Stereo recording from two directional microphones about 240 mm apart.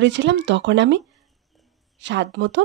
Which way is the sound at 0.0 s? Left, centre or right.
Right.